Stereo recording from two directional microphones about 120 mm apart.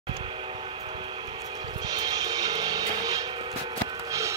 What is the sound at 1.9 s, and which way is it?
Music, 35° right (ahead or behind).